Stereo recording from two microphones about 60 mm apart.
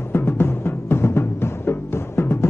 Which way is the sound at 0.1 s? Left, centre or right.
Left.